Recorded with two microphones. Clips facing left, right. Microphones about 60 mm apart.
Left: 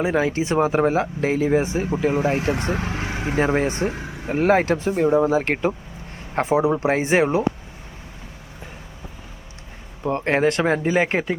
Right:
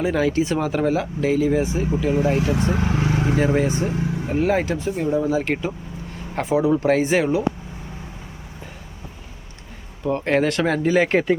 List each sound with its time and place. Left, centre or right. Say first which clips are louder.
0.0 s speech: right 1 dB; left
6.3 s speech: even; left
10.0 s speech: even; left; by 11.3 s centre